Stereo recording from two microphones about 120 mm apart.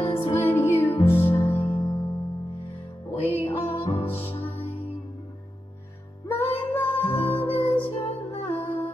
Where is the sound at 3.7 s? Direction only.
50° left (ahead or behind).